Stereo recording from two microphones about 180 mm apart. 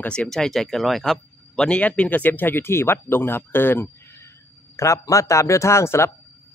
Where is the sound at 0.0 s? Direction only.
5° left (ahead or behind).